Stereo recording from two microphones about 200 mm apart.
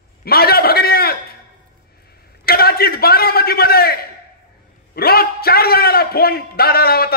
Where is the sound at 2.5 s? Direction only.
50° left (ahead or behind).